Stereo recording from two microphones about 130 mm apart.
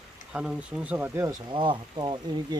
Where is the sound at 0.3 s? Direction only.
10° right (ahead or behind).